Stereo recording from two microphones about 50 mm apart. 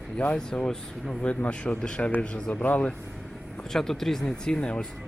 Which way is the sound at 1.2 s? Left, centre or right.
Left.